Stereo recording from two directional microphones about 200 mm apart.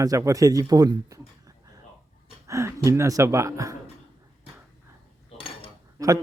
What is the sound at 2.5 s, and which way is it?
Speech, 15° right (ahead or behind).